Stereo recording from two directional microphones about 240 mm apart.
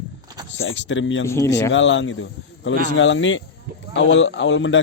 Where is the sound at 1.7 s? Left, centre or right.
Left.